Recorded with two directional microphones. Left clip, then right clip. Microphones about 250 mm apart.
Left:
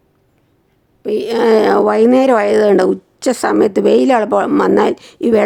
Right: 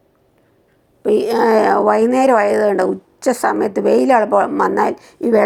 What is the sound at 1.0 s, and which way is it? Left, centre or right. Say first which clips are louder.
Speech: right 1 dB; centre.